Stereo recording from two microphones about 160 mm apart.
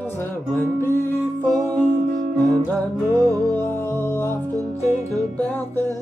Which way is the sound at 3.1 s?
20° right (ahead or behind).